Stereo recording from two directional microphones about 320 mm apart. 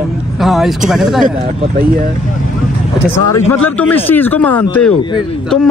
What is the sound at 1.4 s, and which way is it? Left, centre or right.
Speech, right.